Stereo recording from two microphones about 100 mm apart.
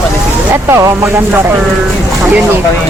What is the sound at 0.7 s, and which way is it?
Speech, 30° right (ahead or behind).